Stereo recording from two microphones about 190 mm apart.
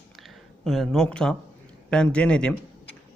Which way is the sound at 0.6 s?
Centre (ahead or behind).